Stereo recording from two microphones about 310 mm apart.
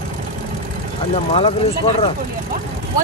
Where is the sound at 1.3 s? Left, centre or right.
Centre.